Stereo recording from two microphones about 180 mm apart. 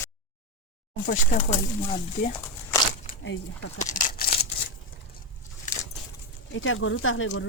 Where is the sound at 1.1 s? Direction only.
45° left (ahead or behind).